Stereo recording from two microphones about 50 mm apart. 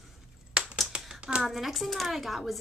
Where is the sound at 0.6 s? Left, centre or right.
Centre.